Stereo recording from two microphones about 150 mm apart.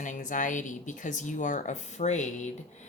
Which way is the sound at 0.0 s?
60° left (ahead or behind).